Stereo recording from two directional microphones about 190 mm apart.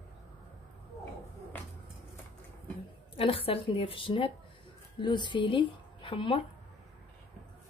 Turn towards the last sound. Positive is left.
turn(degrees=25)  # may be behind; listen again after turning